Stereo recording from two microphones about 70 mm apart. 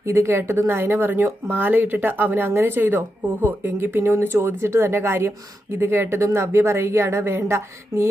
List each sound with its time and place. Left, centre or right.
0.0 s speech: right
3.9 s speech: right